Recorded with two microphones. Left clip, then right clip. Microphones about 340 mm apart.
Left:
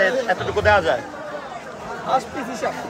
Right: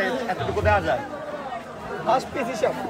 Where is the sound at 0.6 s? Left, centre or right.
Left.